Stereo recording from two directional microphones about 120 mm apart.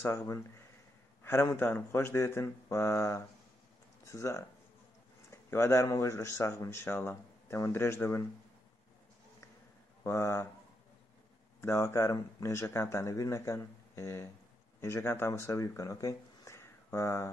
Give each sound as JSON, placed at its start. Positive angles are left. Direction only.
{"t": 0.0, "sound": "speech", "side_deg": 20}
{"t": 10.0, "sound": "speech", "side_deg": 20}
{"t": 11.6, "sound": "speech", "side_deg": 20}